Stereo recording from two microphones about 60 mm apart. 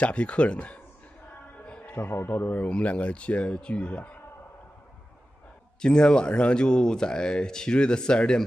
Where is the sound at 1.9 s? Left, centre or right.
Left.